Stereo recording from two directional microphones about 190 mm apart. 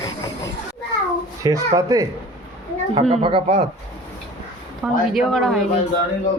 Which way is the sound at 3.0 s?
30° right (ahead or behind).